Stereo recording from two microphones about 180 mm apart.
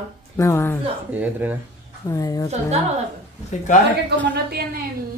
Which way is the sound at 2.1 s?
20° left (ahead or behind).